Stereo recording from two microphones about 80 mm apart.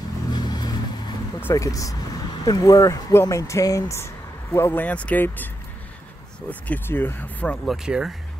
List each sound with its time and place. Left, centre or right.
0.3 s vehicle: left
1.5 s speech: left
4.8 s speech: centre
6.7 s speech: left
7.6 s speech: centre